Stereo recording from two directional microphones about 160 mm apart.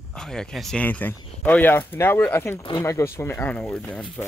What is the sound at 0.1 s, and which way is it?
Speech, 5° left (ahead or behind).